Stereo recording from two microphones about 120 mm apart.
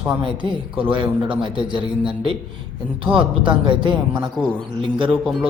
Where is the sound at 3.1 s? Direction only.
45° right (ahead or behind).